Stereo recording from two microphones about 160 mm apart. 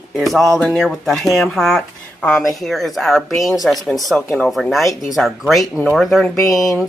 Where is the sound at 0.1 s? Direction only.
Centre (ahead or behind).